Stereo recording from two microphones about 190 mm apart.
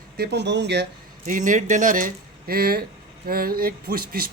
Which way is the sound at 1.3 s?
45° right (ahead or behind).